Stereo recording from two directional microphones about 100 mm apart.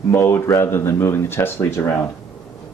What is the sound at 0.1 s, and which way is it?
Speech, 25° left (ahead or behind).